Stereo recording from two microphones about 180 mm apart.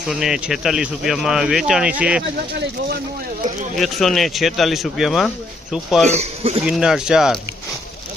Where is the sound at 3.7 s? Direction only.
Centre (ahead or behind).